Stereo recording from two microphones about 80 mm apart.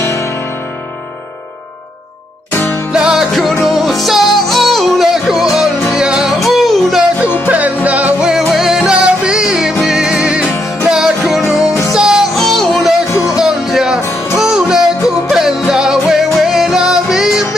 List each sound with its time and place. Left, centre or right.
0.0 s music: left
2.9 s music: centre
7.4 s music: centre
8.3 s music: centre